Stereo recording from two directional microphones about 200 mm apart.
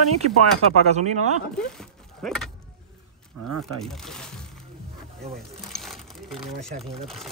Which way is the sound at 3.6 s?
Centre (ahead or behind).